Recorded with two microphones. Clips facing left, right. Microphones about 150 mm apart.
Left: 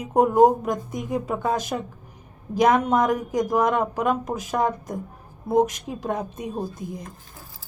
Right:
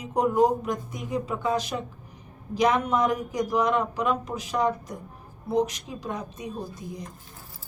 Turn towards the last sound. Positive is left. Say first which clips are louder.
# left 5 dB
turn(degrees=55)  # may be behind; listen again after turning